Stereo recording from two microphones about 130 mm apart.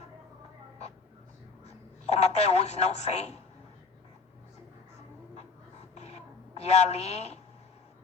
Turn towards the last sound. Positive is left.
turn(degrees=55)  # may be behind; listen again after turning